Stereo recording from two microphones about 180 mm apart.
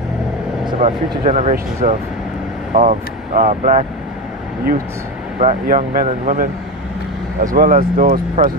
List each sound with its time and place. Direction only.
0.8 s speech: 40° right (ahead or behind)
5.4 s speech: 40° right (ahead or behind)
7.5 s speech: 50° right (ahead or behind)